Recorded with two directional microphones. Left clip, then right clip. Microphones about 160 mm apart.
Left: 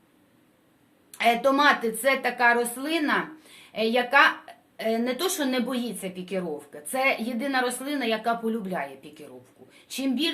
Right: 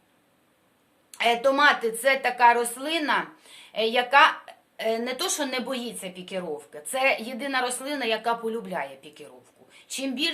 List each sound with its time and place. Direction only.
1.1 s a woman's voice: 25° right (ahead or behind)